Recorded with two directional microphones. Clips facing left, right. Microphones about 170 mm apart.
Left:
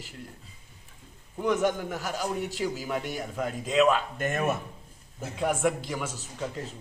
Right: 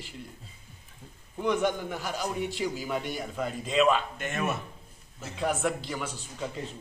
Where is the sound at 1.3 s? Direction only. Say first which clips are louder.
Left 1 dB; 5° left (ahead or behind).